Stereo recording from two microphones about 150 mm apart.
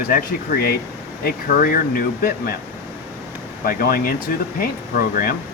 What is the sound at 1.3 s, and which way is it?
Speech, 75° left (ahead or behind).